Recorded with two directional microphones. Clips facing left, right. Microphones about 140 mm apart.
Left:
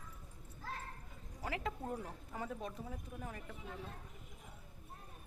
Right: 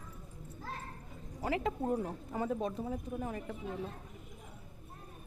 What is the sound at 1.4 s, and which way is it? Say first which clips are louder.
A woman's voice: right 8 dB; 25° right (ahead or behind).